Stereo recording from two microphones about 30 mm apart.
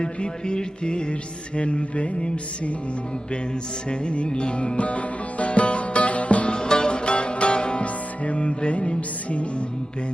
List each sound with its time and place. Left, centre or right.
0.0 s music: left
3.8 s music: left
6.5 s music: left
7.9 s music: left